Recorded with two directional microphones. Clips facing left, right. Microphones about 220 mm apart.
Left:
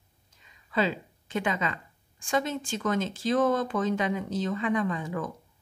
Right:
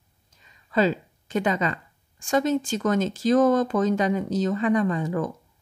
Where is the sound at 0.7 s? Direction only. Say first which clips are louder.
Right 6 dB; 40° right (ahead or behind).